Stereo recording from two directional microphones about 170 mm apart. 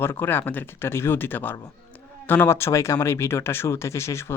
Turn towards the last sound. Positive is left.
turn(degrees=15)  # may be behind; listen again after turning